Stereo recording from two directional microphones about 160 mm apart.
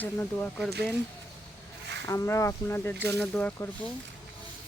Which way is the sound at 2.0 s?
15° left (ahead or behind).